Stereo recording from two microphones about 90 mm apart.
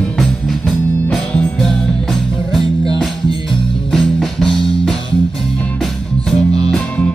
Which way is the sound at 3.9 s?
Centre (ahead or behind).